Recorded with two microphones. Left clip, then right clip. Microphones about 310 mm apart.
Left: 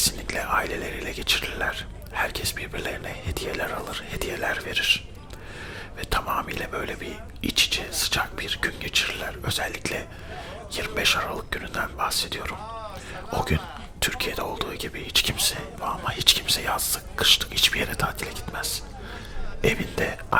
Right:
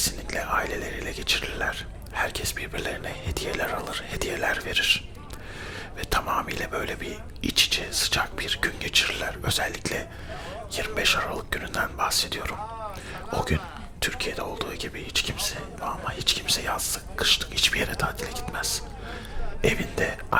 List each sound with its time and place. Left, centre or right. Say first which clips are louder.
0.3 s speech: right 1 dB; centre